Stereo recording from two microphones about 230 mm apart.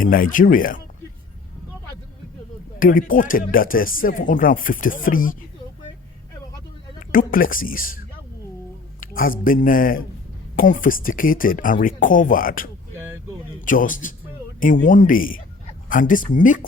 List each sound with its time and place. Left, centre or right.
0.0 s speech: left
2.7 s speech: left
7.1 s speech: left
9.0 s speech: left